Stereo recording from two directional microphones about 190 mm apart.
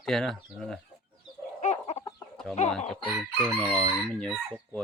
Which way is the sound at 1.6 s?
35° left (ahead or behind).